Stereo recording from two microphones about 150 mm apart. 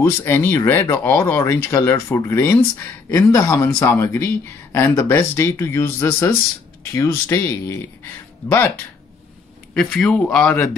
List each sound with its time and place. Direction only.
0.0 s speech: 15° left (ahead or behind)
9.8 s speech: 5° left (ahead or behind)